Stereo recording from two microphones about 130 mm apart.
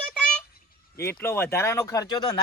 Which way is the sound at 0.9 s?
20° left (ahead or behind).